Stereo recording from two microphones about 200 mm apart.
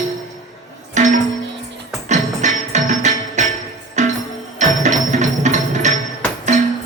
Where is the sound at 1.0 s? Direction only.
35° right (ahead or behind).